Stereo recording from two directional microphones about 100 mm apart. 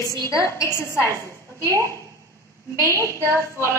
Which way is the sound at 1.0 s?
30° right (ahead or behind).